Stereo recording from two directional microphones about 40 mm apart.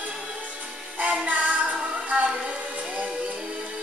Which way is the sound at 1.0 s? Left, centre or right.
Right.